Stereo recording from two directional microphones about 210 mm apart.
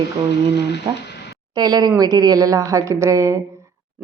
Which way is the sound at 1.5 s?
20° right (ahead or behind).